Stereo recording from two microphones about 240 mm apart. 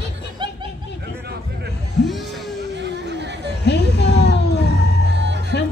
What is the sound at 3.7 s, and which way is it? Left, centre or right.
Music, left.